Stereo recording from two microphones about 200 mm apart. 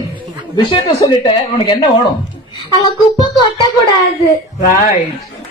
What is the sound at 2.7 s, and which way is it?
Speech, 20° left (ahead or behind).